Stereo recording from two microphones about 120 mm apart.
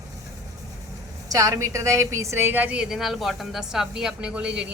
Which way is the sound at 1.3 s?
25° right (ahead or behind).